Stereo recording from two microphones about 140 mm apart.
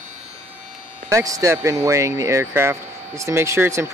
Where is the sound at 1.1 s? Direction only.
25° right (ahead or behind).